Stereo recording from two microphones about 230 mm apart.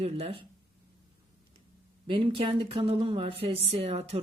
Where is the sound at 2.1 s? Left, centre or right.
Right.